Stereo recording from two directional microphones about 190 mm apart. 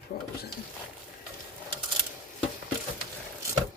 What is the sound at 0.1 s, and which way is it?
Speech, 45° left (ahead or behind).